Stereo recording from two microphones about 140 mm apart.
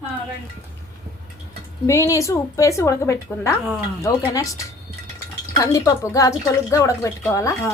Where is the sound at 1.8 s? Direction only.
20° left (ahead or behind).